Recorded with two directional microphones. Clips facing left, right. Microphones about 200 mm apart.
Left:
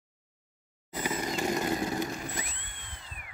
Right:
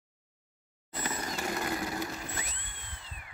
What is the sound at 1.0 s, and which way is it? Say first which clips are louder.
Vehicle: left 5 dB; 15° left (ahead or behind).